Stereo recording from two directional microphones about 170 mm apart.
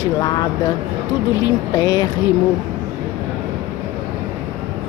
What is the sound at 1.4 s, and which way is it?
Speech, 20° left (ahead or behind).